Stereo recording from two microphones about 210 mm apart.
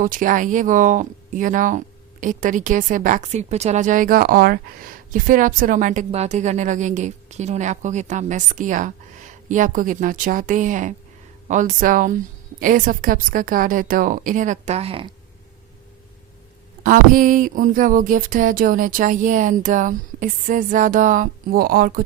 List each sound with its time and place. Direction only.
0.0 s a woman's voice: 40° right (ahead or behind)
16.8 s a woman's voice: 40° right (ahead or behind)